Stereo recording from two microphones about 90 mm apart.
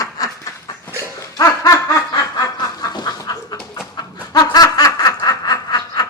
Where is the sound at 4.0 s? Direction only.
45° left (ahead or behind).